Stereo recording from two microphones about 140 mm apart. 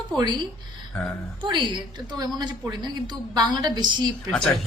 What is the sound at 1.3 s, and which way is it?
A woman's voice, 35° right (ahead or behind).